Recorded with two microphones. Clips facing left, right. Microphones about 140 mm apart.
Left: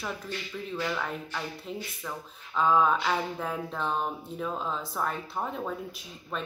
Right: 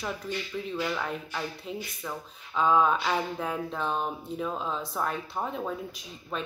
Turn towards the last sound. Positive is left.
turn(degrees=0)  # may be behind; listen again after turning